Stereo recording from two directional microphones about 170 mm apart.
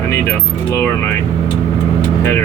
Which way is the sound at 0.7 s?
15° left (ahead or behind).